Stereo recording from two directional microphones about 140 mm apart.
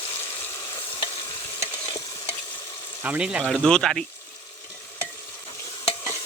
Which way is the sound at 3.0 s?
10° right (ahead or behind).